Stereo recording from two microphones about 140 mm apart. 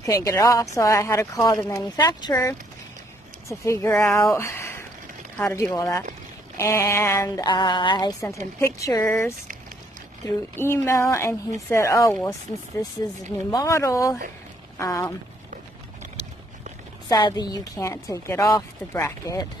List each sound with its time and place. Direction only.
0.0 s a woman's voice: 25° left (ahead or behind)
17.1 s a woman's voice: 30° left (ahead or behind)